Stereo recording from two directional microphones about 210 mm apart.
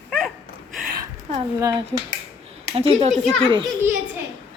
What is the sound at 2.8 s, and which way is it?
Speech, 30° right (ahead or behind).